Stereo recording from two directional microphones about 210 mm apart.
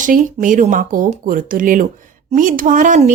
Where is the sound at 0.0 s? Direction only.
40° right (ahead or behind).